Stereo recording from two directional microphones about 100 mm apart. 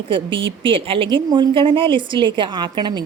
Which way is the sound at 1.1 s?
50° right (ahead or behind).